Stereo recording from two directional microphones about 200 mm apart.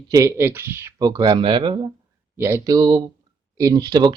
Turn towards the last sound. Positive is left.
turn(degrees=-20)  # may be behind; listen again after turning